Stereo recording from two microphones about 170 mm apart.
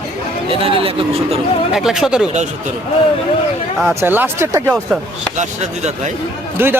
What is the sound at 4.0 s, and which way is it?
Speech, 15° right (ahead or behind).